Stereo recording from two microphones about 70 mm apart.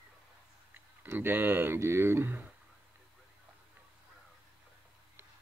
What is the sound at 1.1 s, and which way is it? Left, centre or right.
Speech, right.